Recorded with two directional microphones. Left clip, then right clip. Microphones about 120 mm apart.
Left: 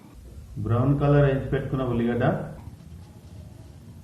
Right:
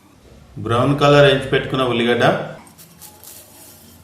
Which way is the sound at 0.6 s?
50° right (ahead or behind).